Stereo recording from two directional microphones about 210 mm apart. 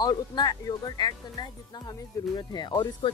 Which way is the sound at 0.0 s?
20° left (ahead or behind).